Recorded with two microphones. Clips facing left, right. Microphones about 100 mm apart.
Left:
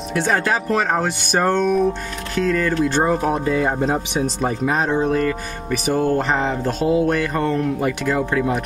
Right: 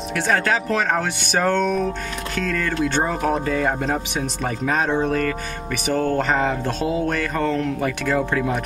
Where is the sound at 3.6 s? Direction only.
25° left (ahead or behind).